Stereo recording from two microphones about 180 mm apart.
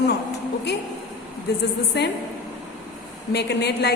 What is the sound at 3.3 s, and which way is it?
Speech, 65° left (ahead or behind).